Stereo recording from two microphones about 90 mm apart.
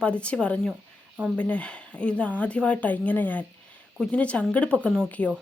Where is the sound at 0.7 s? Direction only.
15° right (ahead or behind).